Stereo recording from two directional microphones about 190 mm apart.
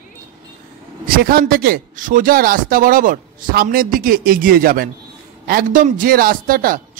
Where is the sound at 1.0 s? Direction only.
50° right (ahead or behind).